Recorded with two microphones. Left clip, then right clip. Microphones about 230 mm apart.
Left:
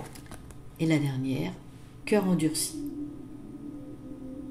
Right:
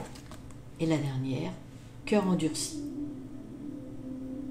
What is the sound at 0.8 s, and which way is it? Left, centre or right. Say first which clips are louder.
A woman's voice: left 3 dB; centre.